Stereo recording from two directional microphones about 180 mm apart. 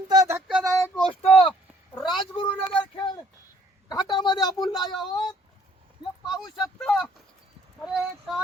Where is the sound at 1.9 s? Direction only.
Centre (ahead or behind).